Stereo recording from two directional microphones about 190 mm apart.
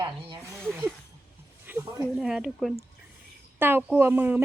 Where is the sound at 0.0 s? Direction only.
25° right (ahead or behind).